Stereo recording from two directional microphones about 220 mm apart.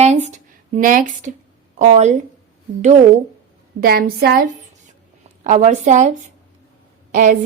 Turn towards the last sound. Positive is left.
turn(degrees=-35)  # may be behind; listen again after turning